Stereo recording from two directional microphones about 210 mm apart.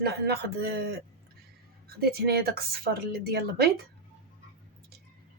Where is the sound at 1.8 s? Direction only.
45° right (ahead or behind).